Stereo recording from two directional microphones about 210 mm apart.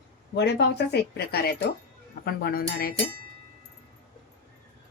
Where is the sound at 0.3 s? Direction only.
55° left (ahead or behind).